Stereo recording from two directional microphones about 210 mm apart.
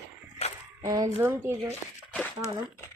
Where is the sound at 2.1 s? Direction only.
10° left (ahead or behind).